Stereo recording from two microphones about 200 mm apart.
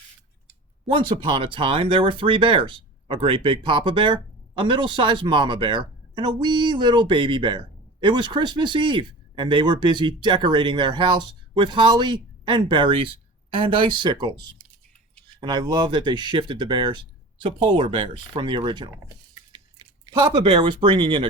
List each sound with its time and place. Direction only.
0.9 s speech: 25° right (ahead or behind)
19.5 s chewing: 20° right (ahead or behind)
20.5 s speech: 25° right (ahead or behind)